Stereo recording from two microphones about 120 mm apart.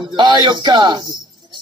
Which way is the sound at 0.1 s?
40° right (ahead or behind).